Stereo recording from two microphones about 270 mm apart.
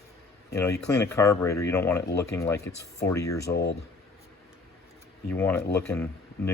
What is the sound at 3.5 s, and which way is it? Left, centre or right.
Speech, left.